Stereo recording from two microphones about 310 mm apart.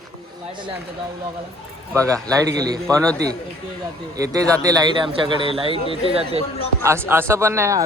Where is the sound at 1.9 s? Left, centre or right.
Centre.